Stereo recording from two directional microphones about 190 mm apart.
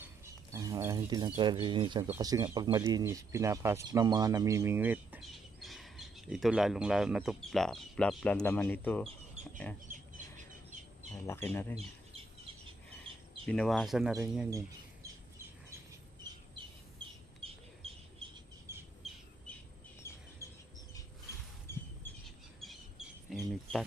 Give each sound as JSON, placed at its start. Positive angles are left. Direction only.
{"t": 0.5, "sound": "speech", "side_deg": -15}
{"t": 9.8, "sound": "bird", "side_deg": -40}
{"t": 11.1, "sound": "speech", "side_deg": 15}
{"t": 13.5, "sound": "speech", "side_deg": 0}
{"t": 17.4, "sound": "a sound", "side_deg": -30}
{"t": 19.0, "sound": "bird", "side_deg": 0}
{"t": 20.4, "sound": "a sound", "side_deg": 15}
{"t": 21.7, "sound": "chirp", "side_deg": 15}
{"t": 23.3, "sound": "a sound", "side_deg": 0}